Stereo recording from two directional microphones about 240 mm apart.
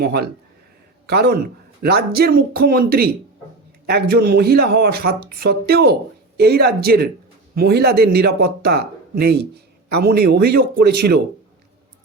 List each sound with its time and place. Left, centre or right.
0.0 s speech: right